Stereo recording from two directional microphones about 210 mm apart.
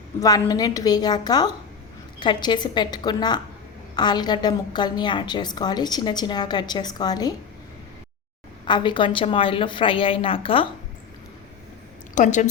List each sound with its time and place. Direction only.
0.2 s a woman's voice: 15° left (ahead or behind)
8.6 s a woman's voice: 20° left (ahead or behind)
12.1 s a woman's voice: 35° left (ahead or behind)